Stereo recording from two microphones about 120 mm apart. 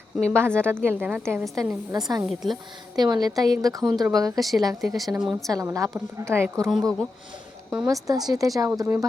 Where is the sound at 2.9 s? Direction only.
35° right (ahead or behind).